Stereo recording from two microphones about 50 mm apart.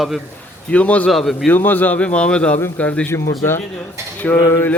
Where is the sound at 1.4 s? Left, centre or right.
Left.